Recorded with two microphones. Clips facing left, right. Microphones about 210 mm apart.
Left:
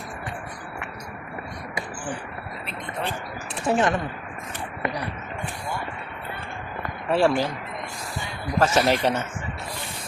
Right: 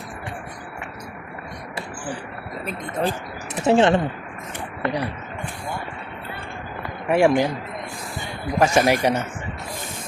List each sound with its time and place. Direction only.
2.6 s speech: 40° right (ahead or behind)
3.5 s speech: 25° right (ahead or behind)
7.1 s speech: 15° right (ahead or behind)
8.5 s speech: 15° right (ahead or behind)